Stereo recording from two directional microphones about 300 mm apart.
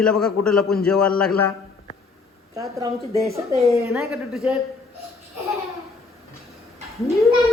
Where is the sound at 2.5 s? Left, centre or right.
Centre.